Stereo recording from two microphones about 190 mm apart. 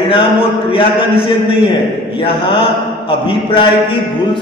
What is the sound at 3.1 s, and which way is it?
A man's voice, 25° left (ahead or behind).